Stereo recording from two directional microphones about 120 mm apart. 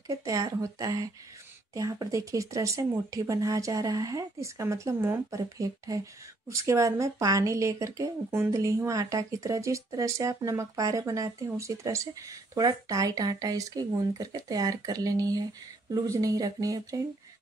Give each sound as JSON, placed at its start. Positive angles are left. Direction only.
{"t": 0.1, "sound": "speech", "side_deg": -30}